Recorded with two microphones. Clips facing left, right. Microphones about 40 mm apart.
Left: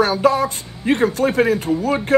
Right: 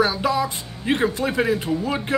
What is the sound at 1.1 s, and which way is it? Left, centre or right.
Speech, left.